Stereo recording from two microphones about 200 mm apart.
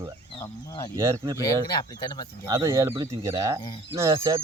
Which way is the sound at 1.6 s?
20° left (ahead or behind).